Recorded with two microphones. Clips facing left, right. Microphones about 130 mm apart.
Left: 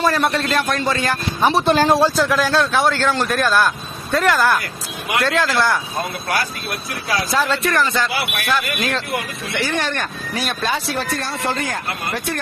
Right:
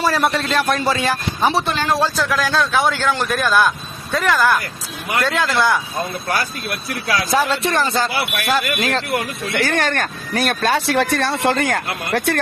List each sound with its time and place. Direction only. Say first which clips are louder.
0.0 s a man's voice: even; centre (ahead or behind)
1.7 s speech: left 5 dB; 35° left (ahead or behind)
2.1 s a man's voice: left 2 dB; 5° left (ahead or behind)
2.9 s a man's voice: left 1 dB; 10° right (ahead or behind)
4.1 s a man's voice: even; centre (ahead or behind)
7.5 s speech: even; 30° right (ahead or behind); by 12.4 s 75° right (ahead or behind)